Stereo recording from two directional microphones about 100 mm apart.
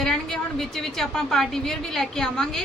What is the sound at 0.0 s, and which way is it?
A woman's voice, 5° left (ahead or behind).